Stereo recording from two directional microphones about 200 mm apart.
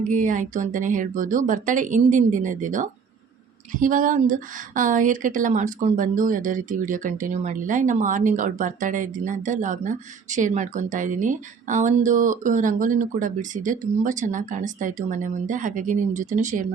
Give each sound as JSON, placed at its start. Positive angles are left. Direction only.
{"t": 0.1, "sound": "a woman's voice", "side_deg": -40}